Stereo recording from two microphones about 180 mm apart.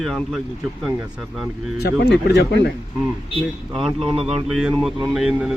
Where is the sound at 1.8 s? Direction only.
65° left (ahead or behind).